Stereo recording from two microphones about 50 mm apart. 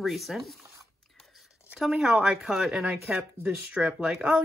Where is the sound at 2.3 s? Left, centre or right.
Centre.